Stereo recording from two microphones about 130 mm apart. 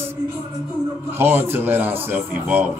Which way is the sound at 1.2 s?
15° right (ahead or behind).